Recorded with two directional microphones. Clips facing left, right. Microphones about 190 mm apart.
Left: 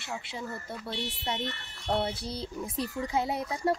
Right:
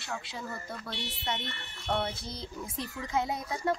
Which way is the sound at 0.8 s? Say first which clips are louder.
Left 5 dB; 35° left (ahead or behind).